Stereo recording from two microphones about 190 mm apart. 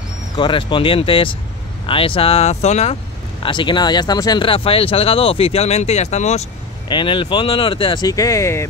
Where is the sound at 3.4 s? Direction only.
25° left (ahead or behind).